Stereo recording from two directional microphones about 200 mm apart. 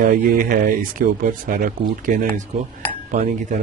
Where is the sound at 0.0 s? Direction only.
45° right (ahead or behind).